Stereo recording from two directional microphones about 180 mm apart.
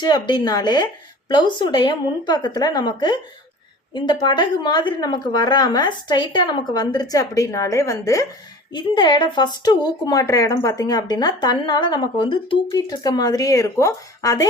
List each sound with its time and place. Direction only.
0.0 s speech: 25° left (ahead or behind)